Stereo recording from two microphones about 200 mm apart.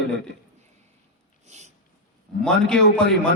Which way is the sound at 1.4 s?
35° right (ahead or behind).